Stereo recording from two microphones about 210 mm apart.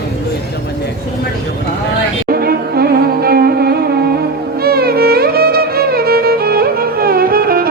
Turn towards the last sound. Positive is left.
turn(degrees=-45)  # may be behind; listen again after turning